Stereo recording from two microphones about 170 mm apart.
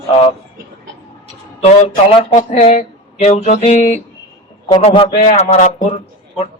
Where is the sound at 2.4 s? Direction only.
40° left (ahead or behind).